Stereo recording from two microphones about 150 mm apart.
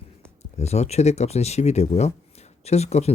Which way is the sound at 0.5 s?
45° left (ahead or behind).